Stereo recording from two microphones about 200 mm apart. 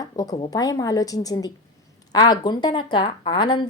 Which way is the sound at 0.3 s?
20° left (ahead or behind).